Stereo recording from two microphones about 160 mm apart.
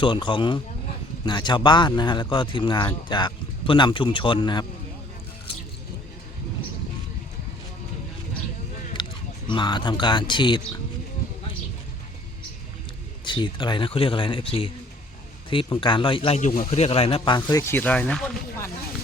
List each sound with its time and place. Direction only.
0.0 s speech: 30° left (ahead or behind)
9.5 s speech: 30° left (ahead or behind)
13.2 s speech: 30° left (ahead or behind)
16.4 s speech: 50° left (ahead or behind); by 18.7 s 15° left (ahead or behind)